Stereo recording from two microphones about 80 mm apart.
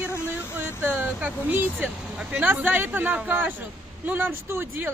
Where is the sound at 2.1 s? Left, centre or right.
Centre.